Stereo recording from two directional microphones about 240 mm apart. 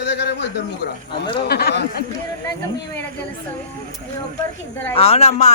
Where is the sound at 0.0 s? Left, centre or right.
Left.